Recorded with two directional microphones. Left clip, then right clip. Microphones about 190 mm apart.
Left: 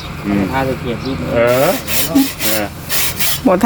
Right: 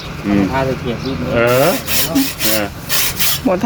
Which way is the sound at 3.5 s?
20° left (ahead or behind).